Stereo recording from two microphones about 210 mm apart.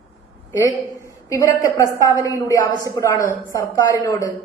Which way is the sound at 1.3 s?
15° left (ahead or behind).